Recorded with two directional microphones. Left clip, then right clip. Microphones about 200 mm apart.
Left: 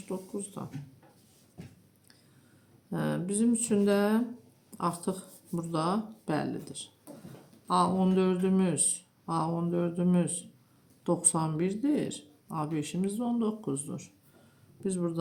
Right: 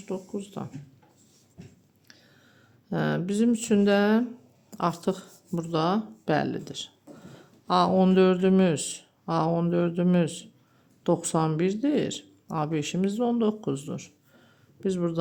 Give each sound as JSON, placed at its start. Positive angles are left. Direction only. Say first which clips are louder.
{"t": 0.1, "sound": "speech", "louder": "right 4 dB", "side_deg": -40}
{"t": 2.9, "sound": "speech", "louder": "right 5 dB", "side_deg": -40}